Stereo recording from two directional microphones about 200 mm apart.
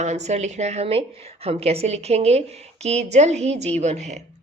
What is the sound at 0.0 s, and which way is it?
A woman's voice, 35° right (ahead or behind).